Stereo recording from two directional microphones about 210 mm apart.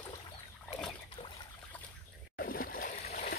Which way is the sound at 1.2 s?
25° left (ahead or behind).